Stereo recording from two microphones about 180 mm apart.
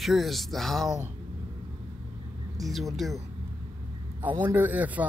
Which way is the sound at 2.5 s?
Centre (ahead or behind).